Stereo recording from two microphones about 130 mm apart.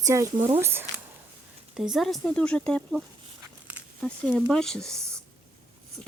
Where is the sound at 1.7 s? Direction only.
5° right (ahead or behind).